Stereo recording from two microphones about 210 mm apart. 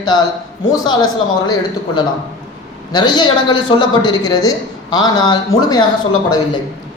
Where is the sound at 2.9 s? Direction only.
20° left (ahead or behind).